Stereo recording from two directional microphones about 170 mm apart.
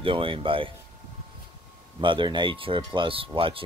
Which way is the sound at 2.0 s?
30° right (ahead or behind).